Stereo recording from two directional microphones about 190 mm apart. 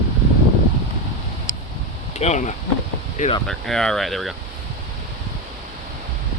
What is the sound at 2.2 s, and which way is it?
Speech, 35° left (ahead or behind).